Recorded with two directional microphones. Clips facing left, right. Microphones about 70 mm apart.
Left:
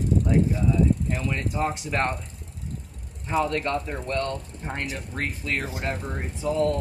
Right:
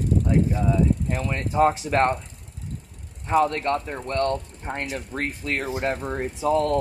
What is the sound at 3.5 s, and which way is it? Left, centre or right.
Speech, right.